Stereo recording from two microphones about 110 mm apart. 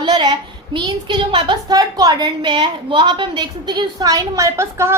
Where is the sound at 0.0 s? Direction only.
40° right (ahead or behind).